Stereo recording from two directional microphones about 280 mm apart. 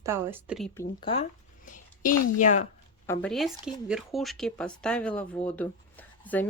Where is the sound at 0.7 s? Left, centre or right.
Centre.